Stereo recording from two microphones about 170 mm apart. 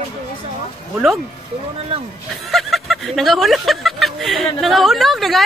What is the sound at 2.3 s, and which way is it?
Speech, centre (ahead or behind).